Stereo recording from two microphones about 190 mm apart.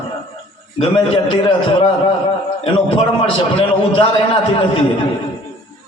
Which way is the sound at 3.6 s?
30° left (ahead or behind).